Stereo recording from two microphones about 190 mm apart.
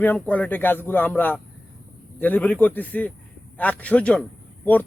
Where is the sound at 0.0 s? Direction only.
10° left (ahead or behind).